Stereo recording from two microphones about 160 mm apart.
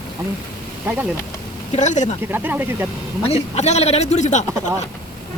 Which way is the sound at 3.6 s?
45° left (ahead or behind).